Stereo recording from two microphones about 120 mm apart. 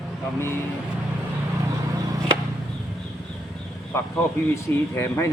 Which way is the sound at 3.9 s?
20° left (ahead or behind).